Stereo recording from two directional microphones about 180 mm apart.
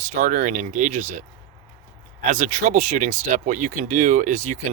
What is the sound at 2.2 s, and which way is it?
Speech, 45° right (ahead or behind).